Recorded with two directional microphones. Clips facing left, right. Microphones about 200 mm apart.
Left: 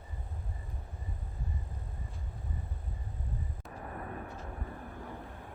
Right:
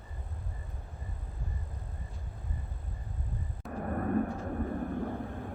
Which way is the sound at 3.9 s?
50° right (ahead or behind).